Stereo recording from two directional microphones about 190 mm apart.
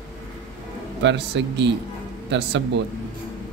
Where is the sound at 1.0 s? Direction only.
65° right (ahead or behind).